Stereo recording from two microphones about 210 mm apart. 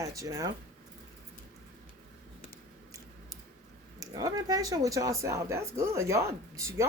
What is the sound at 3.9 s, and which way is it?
Speech, 15° right (ahead or behind).